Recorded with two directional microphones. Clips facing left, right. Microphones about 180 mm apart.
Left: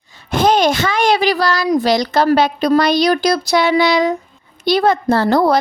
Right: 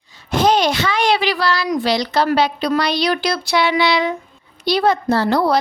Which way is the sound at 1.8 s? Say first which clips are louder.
Left 3 dB; 45° left (ahead or behind).